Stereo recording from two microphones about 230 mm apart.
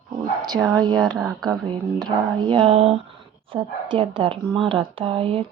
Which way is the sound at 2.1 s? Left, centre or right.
Right.